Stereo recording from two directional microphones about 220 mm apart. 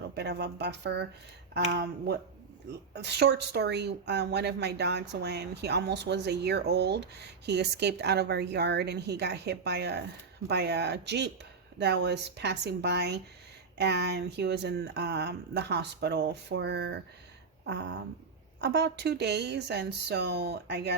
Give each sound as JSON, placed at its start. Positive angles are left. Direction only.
{"t": 0.2, "sound": "a woman's voice", "side_deg": -50}
{"t": 18.6, "sound": "a woman's voice", "side_deg": -50}